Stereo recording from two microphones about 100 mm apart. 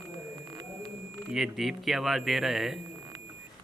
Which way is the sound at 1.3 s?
5° right (ahead or behind).